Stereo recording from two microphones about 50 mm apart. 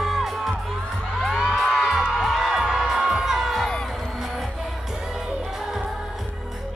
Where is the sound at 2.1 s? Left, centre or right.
Centre.